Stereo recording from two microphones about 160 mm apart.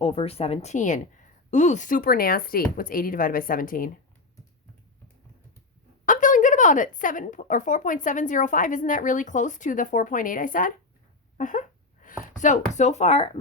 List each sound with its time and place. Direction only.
0.0 s a woman's voice: 35° left (ahead or behind); by 3.9 s 60° left (ahead or behind)
6.1 s speech: 55° left (ahead or behind)
11.3 s a sound: 55° left (ahead or behind)
12.2 s speech: 50° left (ahead or behind)